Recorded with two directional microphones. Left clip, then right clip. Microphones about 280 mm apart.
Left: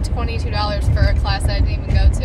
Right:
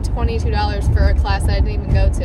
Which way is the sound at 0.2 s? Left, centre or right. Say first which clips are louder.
Right 2 dB; centre.